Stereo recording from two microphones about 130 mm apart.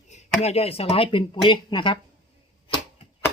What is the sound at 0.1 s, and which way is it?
Speech, 55° left (ahead or behind).